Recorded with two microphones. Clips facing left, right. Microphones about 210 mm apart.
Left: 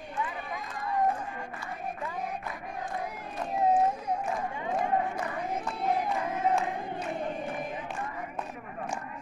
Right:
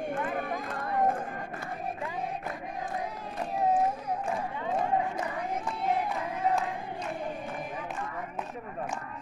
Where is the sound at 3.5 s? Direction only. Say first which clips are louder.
Left 2 dB; 15° left (ahead or behind).